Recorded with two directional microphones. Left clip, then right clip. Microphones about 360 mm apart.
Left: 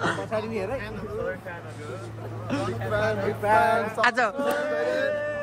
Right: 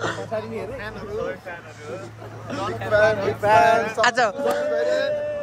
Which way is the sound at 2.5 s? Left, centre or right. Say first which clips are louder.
Right 1 dB; centre.